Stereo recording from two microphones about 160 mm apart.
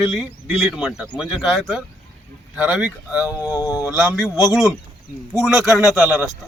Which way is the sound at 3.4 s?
20° left (ahead or behind).